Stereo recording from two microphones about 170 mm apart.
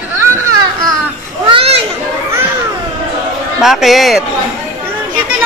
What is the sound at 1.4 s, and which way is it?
Children playing, 35° right (ahead or behind).